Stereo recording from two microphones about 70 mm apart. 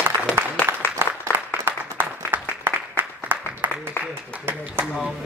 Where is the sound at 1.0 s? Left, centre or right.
Right.